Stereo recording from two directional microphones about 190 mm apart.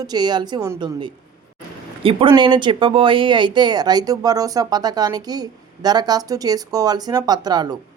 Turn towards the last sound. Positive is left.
turn(degrees=-20)  # may be behind; listen again after turning